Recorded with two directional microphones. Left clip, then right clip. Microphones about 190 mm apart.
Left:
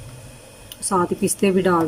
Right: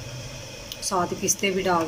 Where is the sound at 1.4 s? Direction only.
45° left (ahead or behind).